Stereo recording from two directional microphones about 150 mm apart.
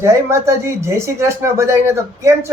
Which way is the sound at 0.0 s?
20° right (ahead or behind).